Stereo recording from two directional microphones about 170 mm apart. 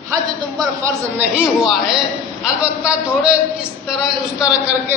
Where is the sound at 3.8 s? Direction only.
5° right (ahead or behind).